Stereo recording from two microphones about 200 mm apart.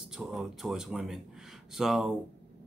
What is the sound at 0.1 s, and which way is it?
Speech, centre (ahead or behind).